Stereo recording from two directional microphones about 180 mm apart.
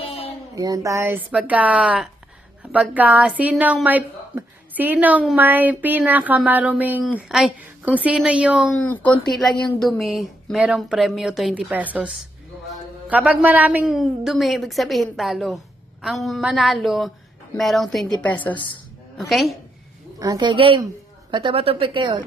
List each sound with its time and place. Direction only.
0.5 s a woman's voice: 20° right (ahead or behind)
8.9 s a woman's voice: 10° left (ahead or behind)
20.1 s a woman's voice: 20° right (ahead or behind)